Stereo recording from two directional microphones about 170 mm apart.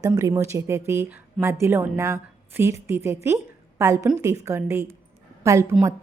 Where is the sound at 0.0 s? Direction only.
20° right (ahead or behind).